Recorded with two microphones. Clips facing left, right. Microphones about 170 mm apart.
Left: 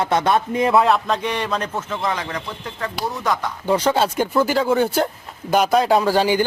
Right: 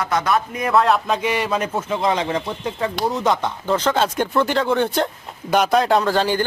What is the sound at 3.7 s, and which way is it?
Speech, 10° left (ahead or behind).